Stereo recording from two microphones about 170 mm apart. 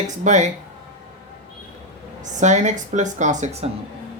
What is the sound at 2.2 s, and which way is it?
Speech, 45° right (ahead or behind).